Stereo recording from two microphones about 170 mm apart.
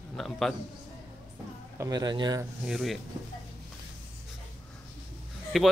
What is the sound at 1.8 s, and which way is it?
Speech, 25° right (ahead or behind).